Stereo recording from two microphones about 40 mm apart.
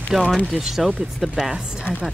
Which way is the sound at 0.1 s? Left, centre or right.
Centre.